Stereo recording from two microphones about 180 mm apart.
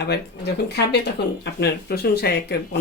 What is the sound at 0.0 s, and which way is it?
Speech, 65° left (ahead or behind).